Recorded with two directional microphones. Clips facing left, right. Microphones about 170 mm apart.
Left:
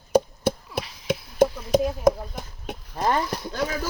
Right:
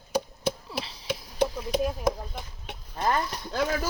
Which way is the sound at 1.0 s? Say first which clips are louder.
Left 7 dB; 45° left (ahead or behind).